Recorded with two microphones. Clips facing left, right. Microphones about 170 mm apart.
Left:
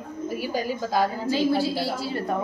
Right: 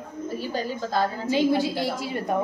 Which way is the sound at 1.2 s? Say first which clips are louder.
Right 1 dB; 20° right (ahead or behind).